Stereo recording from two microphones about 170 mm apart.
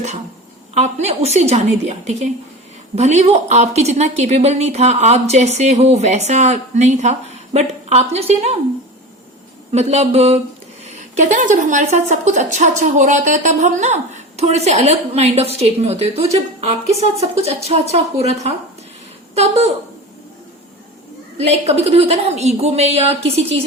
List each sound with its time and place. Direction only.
0.7 s a woman's voice: 40° right (ahead or behind)
9.7 s a woman's voice: 40° right (ahead or behind)
21.3 s a woman's voice: 40° right (ahead or behind)